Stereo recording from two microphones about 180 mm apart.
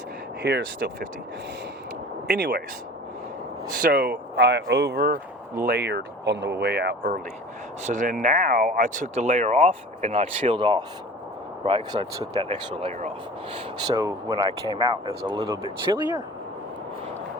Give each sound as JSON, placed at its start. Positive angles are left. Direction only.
{"t": 0.4, "sound": "speech", "side_deg": -80}
{"t": 2.2, "sound": "speech", "side_deg": -65}
{"t": 3.7, "sound": "speech", "side_deg": -50}
{"t": 7.9, "sound": "speech", "side_deg": -45}
{"t": 12.5, "sound": "speech", "side_deg": -35}
{"t": 13.8, "sound": "speech", "side_deg": -20}